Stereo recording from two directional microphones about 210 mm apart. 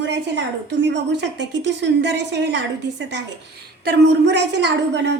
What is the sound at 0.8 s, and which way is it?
A woman's voice, 55° right (ahead or behind).